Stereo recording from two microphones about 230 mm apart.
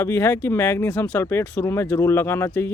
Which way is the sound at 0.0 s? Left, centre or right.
Centre.